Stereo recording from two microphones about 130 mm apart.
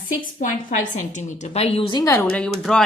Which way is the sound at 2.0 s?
20° left (ahead or behind).